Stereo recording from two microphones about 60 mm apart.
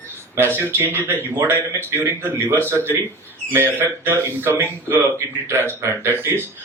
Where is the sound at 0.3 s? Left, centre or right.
Right.